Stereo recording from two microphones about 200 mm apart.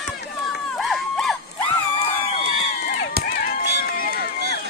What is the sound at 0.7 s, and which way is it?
Crowd, centre (ahead or behind).